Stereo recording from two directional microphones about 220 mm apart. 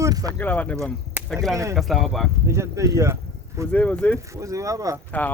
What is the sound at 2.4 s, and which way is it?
Speech, 10° right (ahead or behind).